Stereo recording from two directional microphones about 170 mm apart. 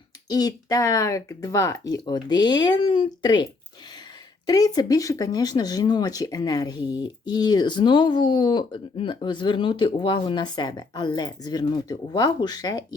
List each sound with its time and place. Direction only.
0.3 s speech: 20° left (ahead or behind)